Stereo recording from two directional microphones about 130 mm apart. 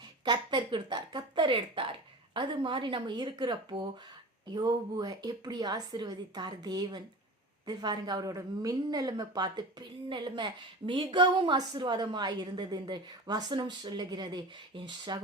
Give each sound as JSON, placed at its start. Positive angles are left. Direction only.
{"t": 0.3, "sound": "a woman's voice", "side_deg": -35}